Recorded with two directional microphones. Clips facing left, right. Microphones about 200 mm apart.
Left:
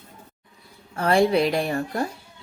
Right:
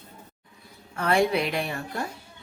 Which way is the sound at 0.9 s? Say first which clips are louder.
Left 4 dB; 35° left (ahead or behind).